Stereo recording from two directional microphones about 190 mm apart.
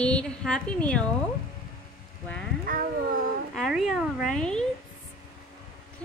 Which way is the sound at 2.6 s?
45° right (ahead or behind).